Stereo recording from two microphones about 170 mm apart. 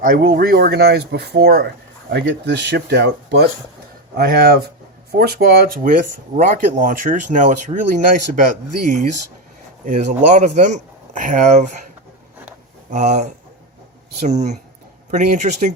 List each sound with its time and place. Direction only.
0.0 s speech: 60° right (ahead or behind); by 3.4 s 85° right
4.1 s speech: 65° right (ahead or behind); by 8.4 s 50° right (ahead or behind)
9.8 s speech: 50° right (ahead or behind)
12.9 s speech: 45° right (ahead or behind)